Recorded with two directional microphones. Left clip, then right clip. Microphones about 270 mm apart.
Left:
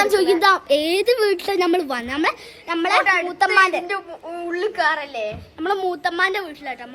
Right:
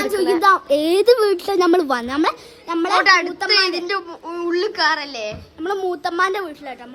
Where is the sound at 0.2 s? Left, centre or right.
Centre.